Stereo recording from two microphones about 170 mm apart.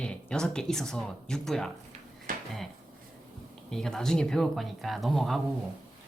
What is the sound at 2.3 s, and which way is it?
Drawer open or close, 55° right (ahead or behind).